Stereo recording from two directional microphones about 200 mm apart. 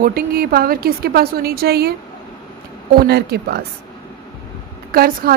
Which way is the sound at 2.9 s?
55° right (ahead or behind).